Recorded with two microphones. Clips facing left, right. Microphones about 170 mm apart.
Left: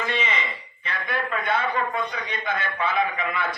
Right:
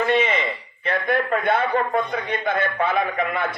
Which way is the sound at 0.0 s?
55° right (ahead or behind).